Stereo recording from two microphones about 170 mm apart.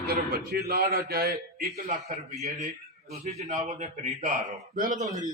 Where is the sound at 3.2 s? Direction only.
40° right (ahead or behind).